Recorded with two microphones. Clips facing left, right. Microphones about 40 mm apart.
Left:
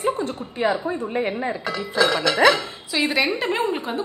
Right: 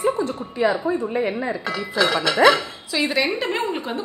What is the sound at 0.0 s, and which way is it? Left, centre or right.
A woman's voice, left.